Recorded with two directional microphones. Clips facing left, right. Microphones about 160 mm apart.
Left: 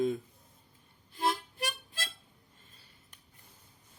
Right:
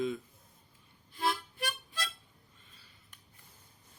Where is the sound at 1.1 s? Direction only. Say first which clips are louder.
Left 2 dB; 40° left (ahead or behind).